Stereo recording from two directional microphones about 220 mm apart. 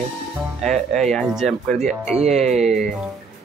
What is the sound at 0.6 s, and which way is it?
Speech, centre (ahead or behind).